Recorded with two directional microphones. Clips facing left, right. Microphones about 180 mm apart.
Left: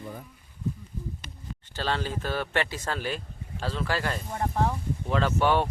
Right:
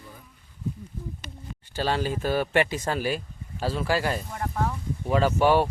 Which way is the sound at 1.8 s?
10° right (ahead or behind).